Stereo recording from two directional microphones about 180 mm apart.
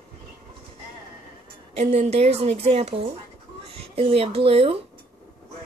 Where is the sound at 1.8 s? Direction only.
35° right (ahead or behind).